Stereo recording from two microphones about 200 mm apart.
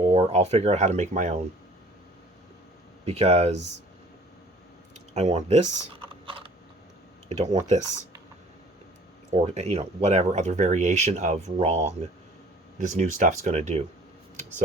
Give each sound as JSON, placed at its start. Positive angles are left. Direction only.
{"t": 0.1, "sound": "speech", "side_deg": -30}
{"t": 3.1, "sound": "speech", "side_deg": -30}
{"t": 4.9, "sound": "speech", "side_deg": -35}
{"t": 6.1, "sound": "a sound", "side_deg": -25}
{"t": 7.3, "sound": "speech", "side_deg": -35}
{"t": 9.3, "sound": "speech", "side_deg": -30}